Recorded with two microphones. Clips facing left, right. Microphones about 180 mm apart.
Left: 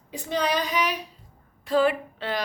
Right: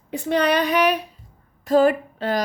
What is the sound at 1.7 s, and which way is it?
Speech, 45° right (ahead or behind).